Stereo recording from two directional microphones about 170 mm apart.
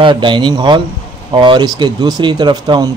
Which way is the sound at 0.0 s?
30° right (ahead or behind).